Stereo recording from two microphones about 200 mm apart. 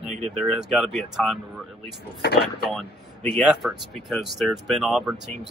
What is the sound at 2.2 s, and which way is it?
Speech, 55° left (ahead or behind).